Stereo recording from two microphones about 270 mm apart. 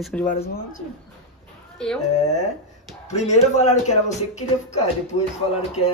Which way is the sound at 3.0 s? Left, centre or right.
Left.